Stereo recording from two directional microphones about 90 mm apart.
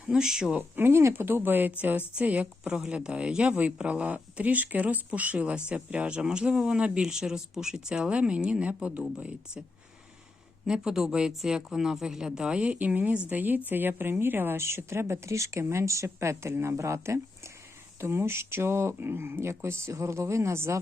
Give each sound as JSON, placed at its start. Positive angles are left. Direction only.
{"t": 0.1, "sound": "speech", "side_deg": -5}
{"t": 0.8, "sound": "speech", "side_deg": -25}